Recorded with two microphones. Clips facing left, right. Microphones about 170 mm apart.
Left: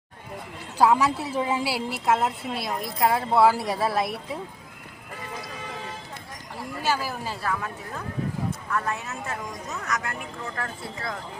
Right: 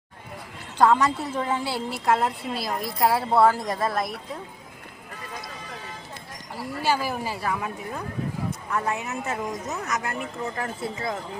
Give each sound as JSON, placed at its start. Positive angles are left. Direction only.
{"t": 0.8, "sound": "a woman's voice", "side_deg": 5}
{"t": 6.8, "sound": "a man's voice", "side_deg": -15}